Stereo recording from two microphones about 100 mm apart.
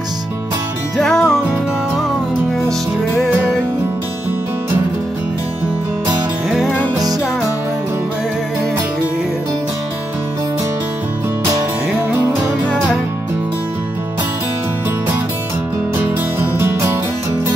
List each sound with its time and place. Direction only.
0.9 s music: 5° left (ahead or behind)
16.0 s music: 20° right (ahead or behind)